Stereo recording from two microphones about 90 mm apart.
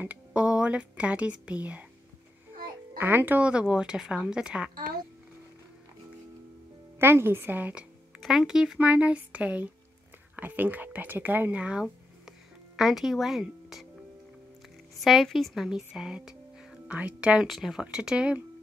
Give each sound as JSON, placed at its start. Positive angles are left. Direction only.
{"t": 0.0, "sound": "speech", "side_deg": -15}
{"t": 3.0, "sound": "speech", "side_deg": -20}
{"t": 7.0, "sound": "speech", "side_deg": -25}
{"t": 8.2, "sound": "speech", "side_deg": -5}
{"t": 8.7, "sound": "speech", "side_deg": -15}
{"t": 15.0, "sound": "a woman's voice", "side_deg": 0}
{"t": 17.5, "sound": "speech", "side_deg": 0}